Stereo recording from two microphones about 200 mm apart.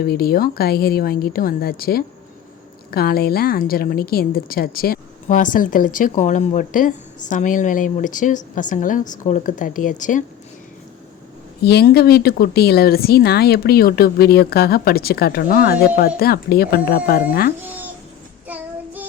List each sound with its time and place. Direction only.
0.0 s a woman's voice: 50° left (ahead or behind)
11.6 s speech: 55° left (ahead or behind)
17.6 s cat: 10° right (ahead or behind)
18.4 s child singing: 10° right (ahead or behind)